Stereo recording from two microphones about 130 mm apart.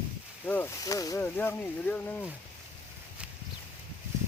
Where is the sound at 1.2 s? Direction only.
15° left (ahead or behind).